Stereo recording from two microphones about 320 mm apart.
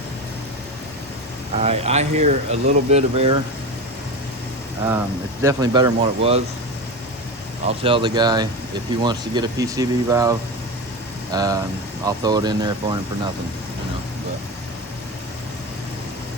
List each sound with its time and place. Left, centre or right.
1.6 s speech: centre
5.4 s speech: centre
7.7 s speech: centre